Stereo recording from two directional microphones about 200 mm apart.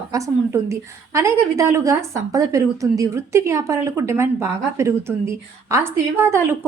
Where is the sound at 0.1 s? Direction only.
15° right (ahead or behind).